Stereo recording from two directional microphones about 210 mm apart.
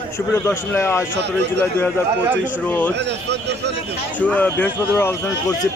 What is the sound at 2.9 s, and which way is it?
Speech, 55° right (ahead or behind).